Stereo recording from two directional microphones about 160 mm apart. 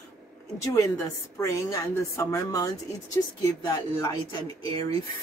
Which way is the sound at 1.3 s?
20° left (ahead or behind).